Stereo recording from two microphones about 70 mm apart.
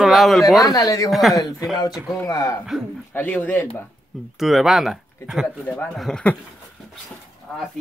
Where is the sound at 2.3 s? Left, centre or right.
Left.